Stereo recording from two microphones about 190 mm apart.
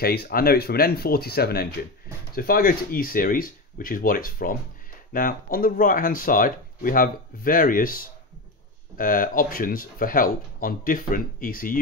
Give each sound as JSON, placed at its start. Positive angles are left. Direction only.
{"t": 0.0, "sound": "speech", "side_deg": 55}